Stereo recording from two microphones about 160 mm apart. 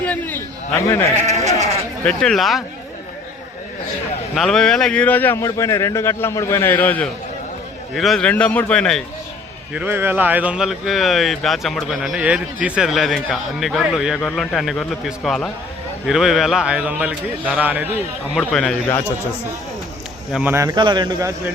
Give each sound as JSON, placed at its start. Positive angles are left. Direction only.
{"t": 0.0, "sound": "a sound", "side_deg": 10}
{"t": 1.3, "sound": "bleat", "side_deg": -45}
{"t": 2.0, "sound": "speech", "side_deg": 5}
{"t": 4.4, "sound": "a man's voice", "side_deg": 5}
{"t": 9.7, "sound": "a man's voice", "side_deg": -15}
{"t": 18.3, "sound": "speech", "side_deg": 5}
{"t": 20.3, "sound": "a man's voice", "side_deg": -10}